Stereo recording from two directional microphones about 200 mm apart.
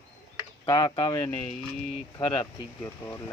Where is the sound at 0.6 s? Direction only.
20° left (ahead or behind).